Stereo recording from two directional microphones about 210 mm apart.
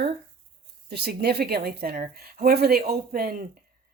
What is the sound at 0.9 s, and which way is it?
Speech, 50° right (ahead or behind).